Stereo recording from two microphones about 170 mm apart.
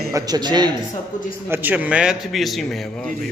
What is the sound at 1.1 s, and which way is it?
Speech, 50° left (ahead or behind).